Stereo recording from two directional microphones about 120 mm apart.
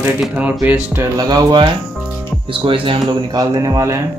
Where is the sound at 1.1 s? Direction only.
35° right (ahead or behind).